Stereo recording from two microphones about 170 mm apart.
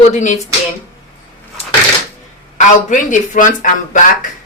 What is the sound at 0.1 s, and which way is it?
Speech, 45° left (ahead or behind).